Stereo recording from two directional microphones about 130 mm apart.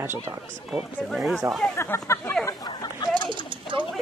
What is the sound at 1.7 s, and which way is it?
Speech, 20° left (ahead or behind).